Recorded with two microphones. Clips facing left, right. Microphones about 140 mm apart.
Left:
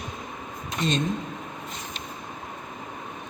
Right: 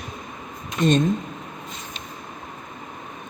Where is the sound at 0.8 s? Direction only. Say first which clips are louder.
Right 7 dB; 50° right (ahead or behind).